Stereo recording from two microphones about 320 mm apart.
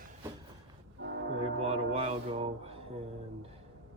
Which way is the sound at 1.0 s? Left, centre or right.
Right.